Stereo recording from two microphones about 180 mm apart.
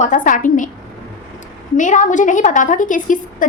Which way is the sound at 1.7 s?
45° left (ahead or behind).